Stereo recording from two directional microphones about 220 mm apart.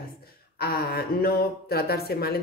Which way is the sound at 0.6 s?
45° left (ahead or behind).